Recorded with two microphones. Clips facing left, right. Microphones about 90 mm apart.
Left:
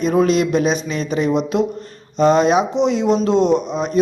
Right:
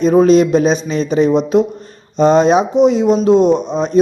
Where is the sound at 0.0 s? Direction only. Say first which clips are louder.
Right 6 dB; 25° right (ahead or behind).